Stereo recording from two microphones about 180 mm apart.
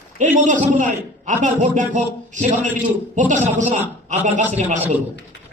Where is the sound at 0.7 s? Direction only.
45° right (ahead or behind).